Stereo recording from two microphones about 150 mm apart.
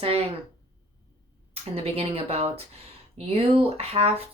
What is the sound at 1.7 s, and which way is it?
Speech, 40° right (ahead or behind).